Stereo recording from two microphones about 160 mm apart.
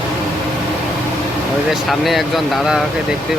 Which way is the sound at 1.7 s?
Centre (ahead or behind).